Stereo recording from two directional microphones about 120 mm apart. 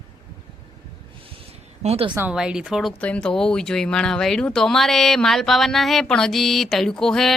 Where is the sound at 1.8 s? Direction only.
60° right (ahead or behind).